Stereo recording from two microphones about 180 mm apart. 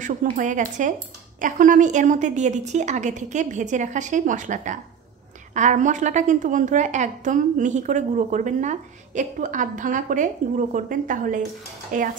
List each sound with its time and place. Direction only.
0.0 s a woman's voice: 45° right (ahead or behind)